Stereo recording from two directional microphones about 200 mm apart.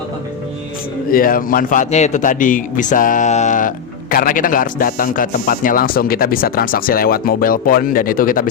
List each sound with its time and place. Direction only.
1.1 s speech: 45° left (ahead or behind)